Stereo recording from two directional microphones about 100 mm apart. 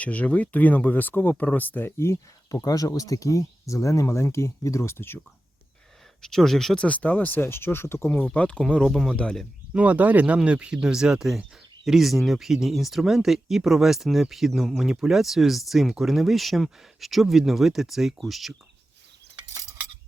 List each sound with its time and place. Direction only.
0.0 s speech: 15° left (ahead or behind)
6.2 s speech: 5° left (ahead or behind)
6.8 s speech: 15° left (ahead or behind)
9.7 s speech: 15° right (ahead or behind)